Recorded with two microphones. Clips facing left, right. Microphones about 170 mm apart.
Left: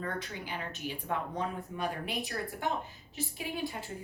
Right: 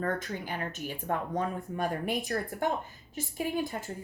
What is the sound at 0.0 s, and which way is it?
A woman's voice, 45° right (ahead or behind).